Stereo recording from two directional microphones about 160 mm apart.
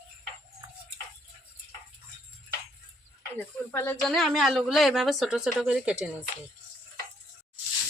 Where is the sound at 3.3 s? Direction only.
15° left (ahead or behind).